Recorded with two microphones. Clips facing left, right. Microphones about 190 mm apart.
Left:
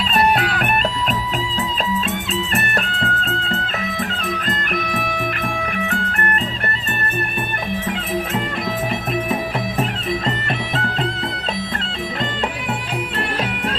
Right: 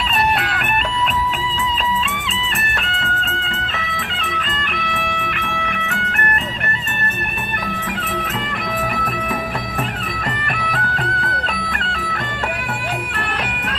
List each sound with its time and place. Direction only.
2.8 s music: 35° left (ahead or behind)
10.6 s music: 25° left (ahead or behind)